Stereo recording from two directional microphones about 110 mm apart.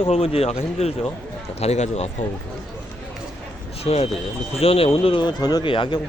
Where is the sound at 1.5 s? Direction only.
80° left.